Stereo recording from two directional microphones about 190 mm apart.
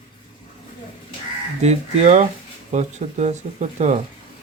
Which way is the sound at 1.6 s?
35° right (ahead or behind).